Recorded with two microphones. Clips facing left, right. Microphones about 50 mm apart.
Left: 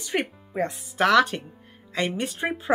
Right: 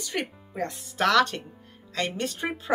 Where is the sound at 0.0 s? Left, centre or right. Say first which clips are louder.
Left 4 dB; centre.